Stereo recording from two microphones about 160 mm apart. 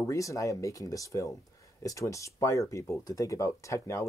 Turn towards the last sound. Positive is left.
turn(degrees=20)  # may be behind; listen again after turning